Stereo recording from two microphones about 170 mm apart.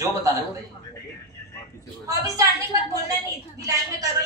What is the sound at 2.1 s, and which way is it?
A woman's voice, 20° right (ahead or behind).